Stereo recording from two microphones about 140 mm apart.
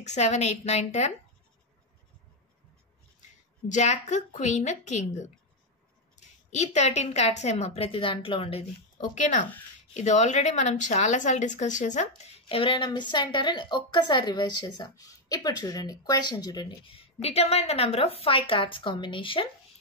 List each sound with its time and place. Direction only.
0.0 s a woman's voice: 55° left (ahead or behind)
3.6 s a woman's voice: 60° left (ahead or behind)
9.2 s speech: 65° left (ahead or behind)
12.2 s a woman's voice: 45° left (ahead or behind)